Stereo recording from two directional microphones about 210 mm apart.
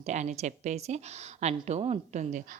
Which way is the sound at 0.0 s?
35° right (ahead or behind).